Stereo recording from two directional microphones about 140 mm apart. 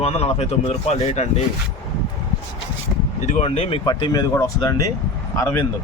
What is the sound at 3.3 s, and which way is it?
Speech, 45° left (ahead or behind).